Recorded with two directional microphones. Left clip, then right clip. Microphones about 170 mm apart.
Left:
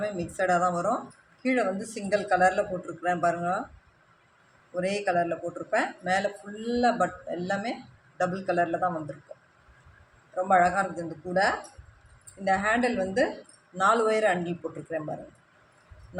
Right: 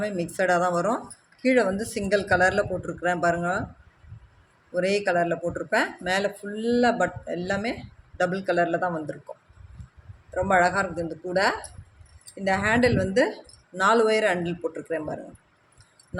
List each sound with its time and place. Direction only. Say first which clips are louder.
0.0 s speech: right 3 dB; 65° right (ahead or behind)
4.7 s speech: right 4 dB; 55° right (ahead or behind)
10.3 s speech: right 1 dB; 60° right (ahead or behind)